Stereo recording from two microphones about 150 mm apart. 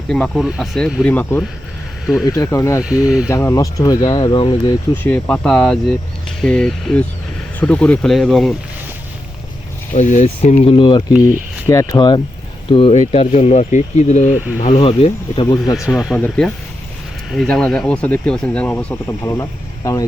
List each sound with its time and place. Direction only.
0.1 s speech: centre (ahead or behind)
1.0 s speech: 10° left (ahead or behind)
2.2 s speech: 20° left (ahead or behind)
2.8 s speech: 5° right (ahead or behind)
3.2 s speech: 20° left (ahead or behind)
5.0 s speech: 10° left (ahead or behind)
9.9 s speech: 55° left (ahead or behind); by 11.0 s 35° left (ahead or behind)
11.7 s speech: 25° left (ahead or behind)
12.7 s speech: 40° left (ahead or behind)
14.3 s speech: 10° right (ahead or behind)
14.7 s speech: 40° left (ahead or behind)
16.0 s speech: 5° left (ahead or behind)